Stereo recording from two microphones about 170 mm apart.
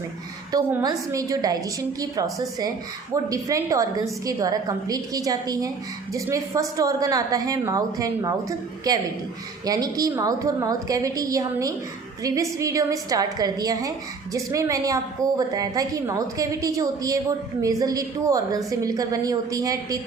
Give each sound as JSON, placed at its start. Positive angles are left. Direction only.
{"t": 0.5, "sound": "a woman's voice", "side_deg": -20}